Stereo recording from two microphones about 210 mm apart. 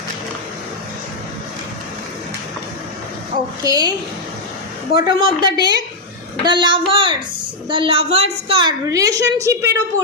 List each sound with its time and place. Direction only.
3.6 s a woman's voice: 20° right (ahead or behind)
5.0 s a woman's voice: 20° right (ahead or behind)